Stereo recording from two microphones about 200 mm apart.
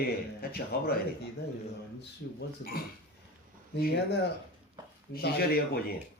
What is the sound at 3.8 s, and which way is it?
Speech, 50° left (ahead or behind).